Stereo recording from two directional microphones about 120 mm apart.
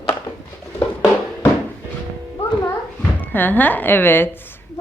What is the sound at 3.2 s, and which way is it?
A woman's voice, 15° left (ahead or behind).